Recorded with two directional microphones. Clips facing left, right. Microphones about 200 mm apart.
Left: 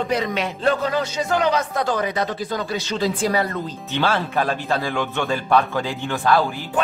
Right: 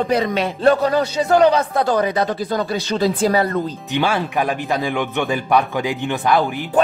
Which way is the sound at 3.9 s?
15° right (ahead or behind).